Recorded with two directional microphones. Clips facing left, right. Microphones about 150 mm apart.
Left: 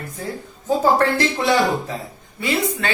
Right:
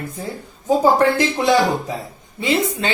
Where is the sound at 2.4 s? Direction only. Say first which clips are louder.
Right 2 dB; 20° right (ahead or behind).